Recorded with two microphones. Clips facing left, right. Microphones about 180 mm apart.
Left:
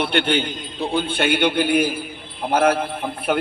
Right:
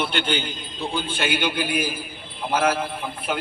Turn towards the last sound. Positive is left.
turn(degrees=55)  # may be behind; listen again after turning